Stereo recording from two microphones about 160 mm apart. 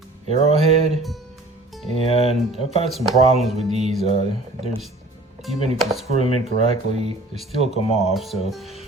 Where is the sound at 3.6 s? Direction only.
45° right (ahead or behind).